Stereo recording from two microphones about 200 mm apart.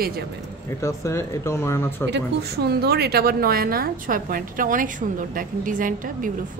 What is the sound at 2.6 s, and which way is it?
A woman's voice, 55° right (ahead or behind).